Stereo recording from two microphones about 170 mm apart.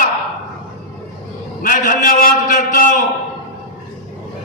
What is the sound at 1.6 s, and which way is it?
A man's voice, 55° left (ahead or behind).